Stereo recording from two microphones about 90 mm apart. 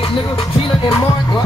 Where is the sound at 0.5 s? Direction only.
90° left.